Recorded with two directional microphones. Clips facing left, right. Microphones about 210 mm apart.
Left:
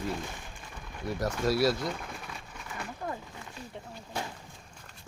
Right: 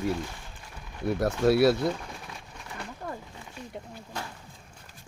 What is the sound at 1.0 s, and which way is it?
Speech, 60° right (ahead or behind).